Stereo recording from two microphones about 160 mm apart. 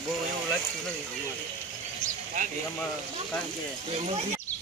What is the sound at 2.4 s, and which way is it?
Speech, 55° right (ahead or behind).